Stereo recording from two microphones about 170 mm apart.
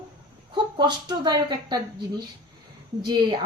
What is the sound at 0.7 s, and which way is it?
A woman's voice, 25° right (ahead or behind).